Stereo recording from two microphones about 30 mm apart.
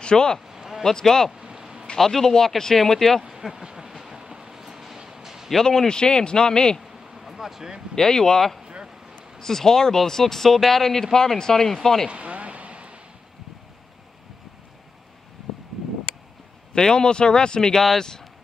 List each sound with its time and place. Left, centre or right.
0.0 s a man's voice: left
0.5 s a sound: centre
0.8 s speech: centre
1.3 s a sound: right
2.0 s speech: centre
3.6 s train: right
4.1 s a sound: right
5.6 s a man's voice: centre
7.2 s vehicle: centre
7.9 s a man's voice: centre
9.4 s speech: centre
12.1 s a sound: right
16.7 s a man's voice: left